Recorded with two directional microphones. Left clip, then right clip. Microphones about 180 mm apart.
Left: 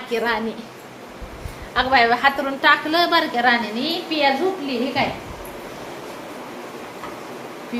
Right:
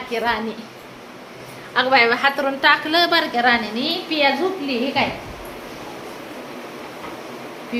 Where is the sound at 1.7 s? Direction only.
15° right (ahead or behind).